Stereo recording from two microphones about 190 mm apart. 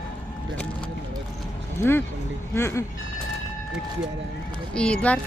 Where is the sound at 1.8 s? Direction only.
10° left (ahead or behind).